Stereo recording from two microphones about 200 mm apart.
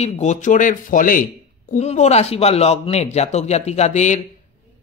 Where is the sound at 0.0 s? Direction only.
35° left (ahead or behind).